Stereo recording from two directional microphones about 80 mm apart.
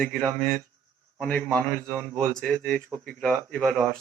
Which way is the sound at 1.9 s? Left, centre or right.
Right.